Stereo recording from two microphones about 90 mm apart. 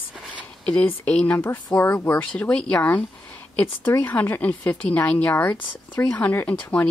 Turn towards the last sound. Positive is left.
turn(degrees=15)  # may be behind; listen again after turning